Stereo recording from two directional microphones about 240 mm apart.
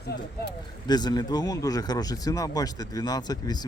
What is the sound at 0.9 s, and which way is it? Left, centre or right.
Speech, centre.